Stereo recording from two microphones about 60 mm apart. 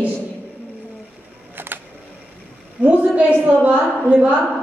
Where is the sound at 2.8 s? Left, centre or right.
Right.